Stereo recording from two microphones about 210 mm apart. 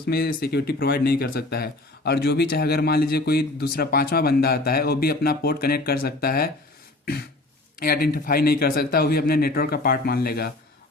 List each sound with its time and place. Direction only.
0.0 s speech: 45° left (ahead or behind)
7.8 s speech: 45° left (ahead or behind)